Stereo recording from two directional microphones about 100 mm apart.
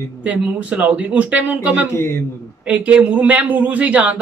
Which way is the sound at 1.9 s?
25° left (ahead or behind).